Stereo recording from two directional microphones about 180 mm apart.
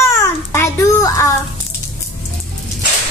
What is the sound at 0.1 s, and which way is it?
Babbling, 15° left (ahead or behind).